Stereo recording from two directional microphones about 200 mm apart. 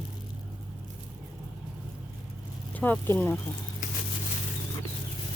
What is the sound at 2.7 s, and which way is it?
Speech, 10° left (ahead or behind).